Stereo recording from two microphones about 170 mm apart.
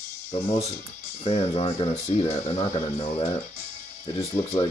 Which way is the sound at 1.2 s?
35° left (ahead or behind).